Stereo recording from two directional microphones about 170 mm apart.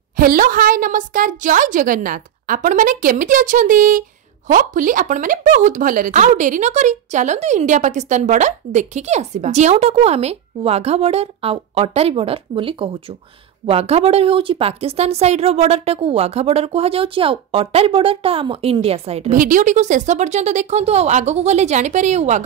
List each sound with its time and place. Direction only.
0.2 s a woman's voice: 55° right (ahead or behind); by 19.3 s 35° right (ahead or behind)
19.3 s speech: 55° right (ahead or behind)